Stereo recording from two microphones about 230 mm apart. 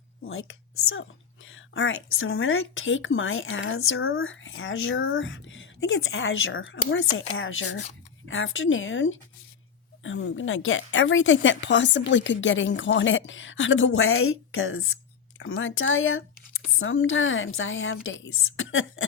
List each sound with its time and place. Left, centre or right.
0.3 s speech: left